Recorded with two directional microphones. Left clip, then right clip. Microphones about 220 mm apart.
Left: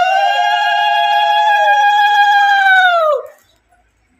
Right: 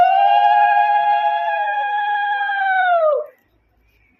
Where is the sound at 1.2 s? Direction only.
15° left (ahead or behind).